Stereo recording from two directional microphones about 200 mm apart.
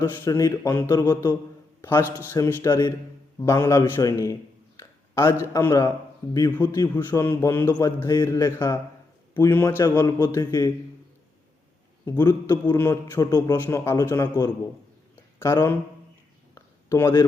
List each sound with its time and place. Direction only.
0.0 s a man's voice: 15° left (ahead or behind)
12.0 s a man's voice: 10° left (ahead or behind)
16.6 s a sound: 15° left (ahead or behind)